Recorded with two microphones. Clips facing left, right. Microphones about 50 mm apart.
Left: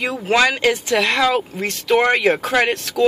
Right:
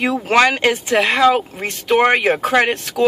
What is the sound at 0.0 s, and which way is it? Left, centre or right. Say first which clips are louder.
Speech: right 3 dB; right.